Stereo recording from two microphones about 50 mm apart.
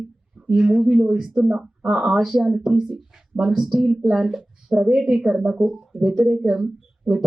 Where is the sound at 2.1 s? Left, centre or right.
Centre.